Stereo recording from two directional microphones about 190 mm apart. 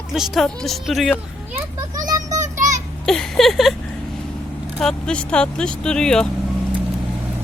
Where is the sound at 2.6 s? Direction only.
40° right (ahead or behind).